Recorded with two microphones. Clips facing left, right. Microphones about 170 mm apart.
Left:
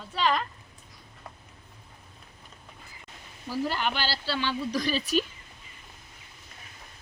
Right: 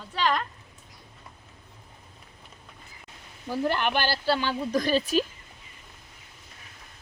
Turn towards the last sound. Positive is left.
turn(degrees=-45)  # may be behind; listen again after turning